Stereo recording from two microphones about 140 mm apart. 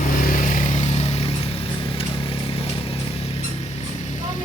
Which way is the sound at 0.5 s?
55° left (ahead or behind).